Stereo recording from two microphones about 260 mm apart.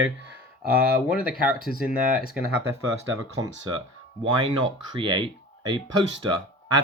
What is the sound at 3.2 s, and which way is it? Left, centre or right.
Speech, centre.